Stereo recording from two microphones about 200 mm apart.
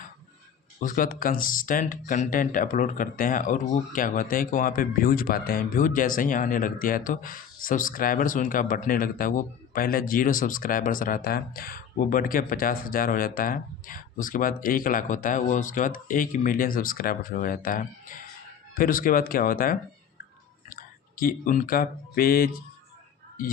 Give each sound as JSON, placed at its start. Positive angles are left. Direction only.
{"t": 0.8, "sound": "speech", "side_deg": 45}
{"t": 21.2, "sound": "speech", "side_deg": 45}